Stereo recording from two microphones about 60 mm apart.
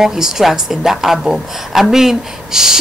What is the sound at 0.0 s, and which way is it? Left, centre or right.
A woman's voice, centre.